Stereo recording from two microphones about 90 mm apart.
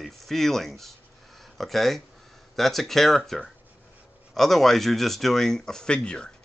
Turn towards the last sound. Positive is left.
turn(degrees=10)  # may be behind; listen again after turning